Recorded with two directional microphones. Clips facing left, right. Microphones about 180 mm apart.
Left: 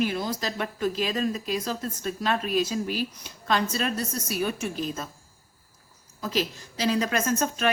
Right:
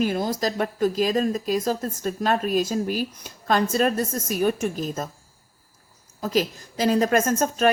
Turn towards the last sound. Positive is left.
turn(degrees=-45)  # may be behind; listen again after turning